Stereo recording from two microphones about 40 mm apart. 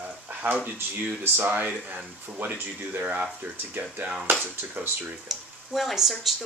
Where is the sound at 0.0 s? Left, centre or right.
Right.